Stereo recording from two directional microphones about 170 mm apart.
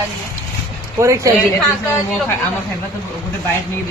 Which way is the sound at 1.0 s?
20° right (ahead or behind).